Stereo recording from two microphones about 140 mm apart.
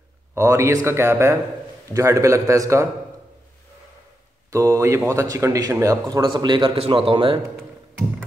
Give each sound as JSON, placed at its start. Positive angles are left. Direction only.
{"t": 0.3, "sound": "a man's voice", "side_deg": -20}
{"t": 4.5, "sound": "a man's voice", "side_deg": -20}